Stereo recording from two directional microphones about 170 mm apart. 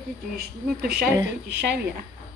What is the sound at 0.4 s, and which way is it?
Speech, 65° right (ahead or behind).